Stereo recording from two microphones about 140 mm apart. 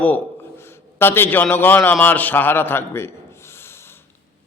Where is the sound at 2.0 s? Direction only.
10° left (ahead or behind).